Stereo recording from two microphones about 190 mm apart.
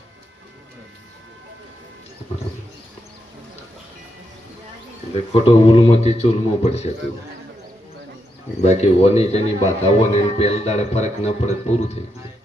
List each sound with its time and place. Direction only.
5.3 s speech: 30° left (ahead or behind)
8.6 s speech: 35° left (ahead or behind)